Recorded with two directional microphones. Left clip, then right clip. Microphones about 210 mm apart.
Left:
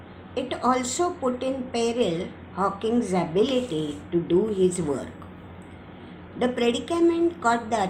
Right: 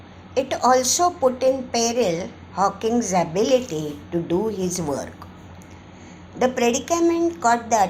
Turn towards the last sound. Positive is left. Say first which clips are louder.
# right 5 dB
turn(degrees=-35)  # may be behind; listen again after turning